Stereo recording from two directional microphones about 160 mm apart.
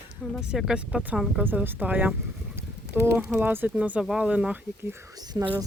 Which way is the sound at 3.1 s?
10° right (ahead or behind).